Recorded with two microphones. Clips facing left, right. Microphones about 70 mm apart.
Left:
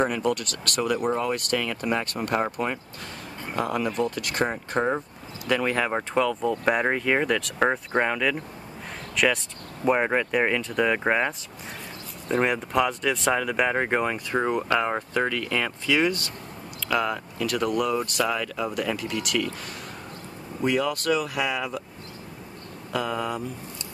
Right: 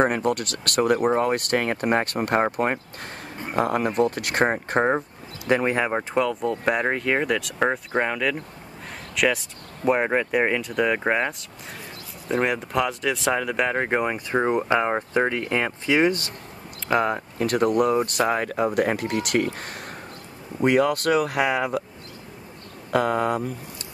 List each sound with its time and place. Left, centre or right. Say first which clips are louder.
0.0 s speech: right 3 dB; right
5.5 s speech: right 3 dB; right
5.9 s speech: right 1 dB; centre
14.1 s speech: right 3 dB; centre; by 21.8 s right
22.8 s speech: right 6 dB; right